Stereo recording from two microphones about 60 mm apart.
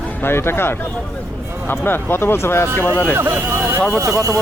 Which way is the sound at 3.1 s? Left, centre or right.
Right.